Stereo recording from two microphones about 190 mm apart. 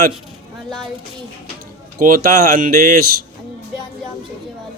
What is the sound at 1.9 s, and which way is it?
Speech, 50° right (ahead or behind).